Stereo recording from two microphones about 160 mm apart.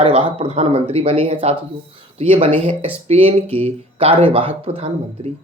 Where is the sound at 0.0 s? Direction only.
35° right (ahead or behind).